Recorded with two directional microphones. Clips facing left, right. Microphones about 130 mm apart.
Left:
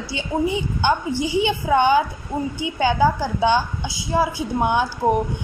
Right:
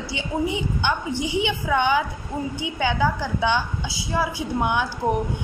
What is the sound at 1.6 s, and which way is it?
A woman's voice, 35° left (ahead or behind).